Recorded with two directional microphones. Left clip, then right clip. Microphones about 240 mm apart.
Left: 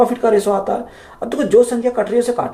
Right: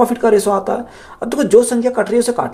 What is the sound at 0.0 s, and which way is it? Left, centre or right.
Speech, right.